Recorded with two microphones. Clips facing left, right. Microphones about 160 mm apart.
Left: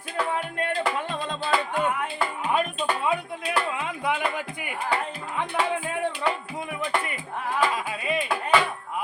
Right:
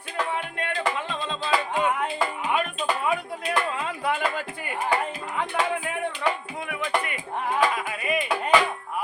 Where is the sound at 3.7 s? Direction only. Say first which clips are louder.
Right 1 dB; 20° left (ahead or behind).